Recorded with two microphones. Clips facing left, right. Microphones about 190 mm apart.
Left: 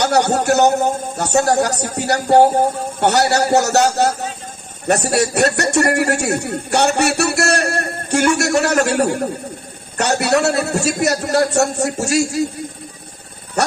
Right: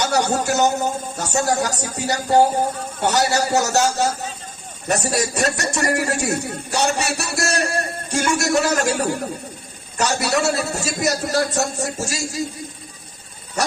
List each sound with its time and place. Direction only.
0.0 s a man's voice: 65° left (ahead or behind)